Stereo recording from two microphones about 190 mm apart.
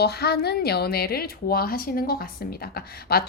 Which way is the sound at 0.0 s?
55° left (ahead or behind).